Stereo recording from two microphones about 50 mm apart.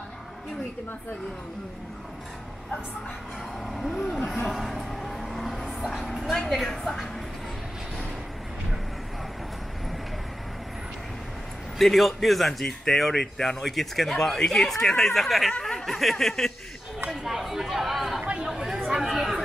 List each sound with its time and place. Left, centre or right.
3.6 s speech: centre
4.5 s music: centre
6.3 s speech: centre
11.8 s speech: centre
15.6 s snicker: centre
17.1 s chatter: centre
18.2 s chatter: right
18.5 s chatter: centre